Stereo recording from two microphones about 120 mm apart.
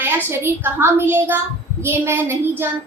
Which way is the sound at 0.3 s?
20° right (ahead or behind).